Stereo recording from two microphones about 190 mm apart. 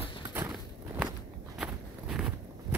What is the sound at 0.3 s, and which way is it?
Walk, 10° right (ahead or behind).